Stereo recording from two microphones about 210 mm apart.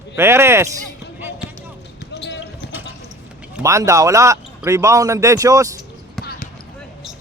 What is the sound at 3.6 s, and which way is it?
Speech, 15° right (ahead or behind).